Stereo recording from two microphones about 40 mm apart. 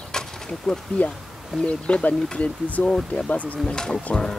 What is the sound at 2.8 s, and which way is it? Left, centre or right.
Speech, centre.